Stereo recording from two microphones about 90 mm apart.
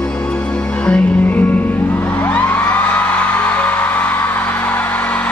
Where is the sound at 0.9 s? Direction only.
20° left (ahead or behind).